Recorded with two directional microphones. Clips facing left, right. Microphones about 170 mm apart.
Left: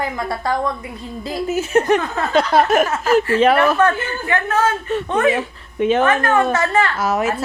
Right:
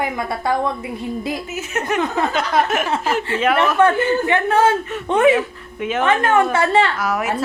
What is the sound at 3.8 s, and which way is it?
A woman's voice, 20° right (ahead or behind).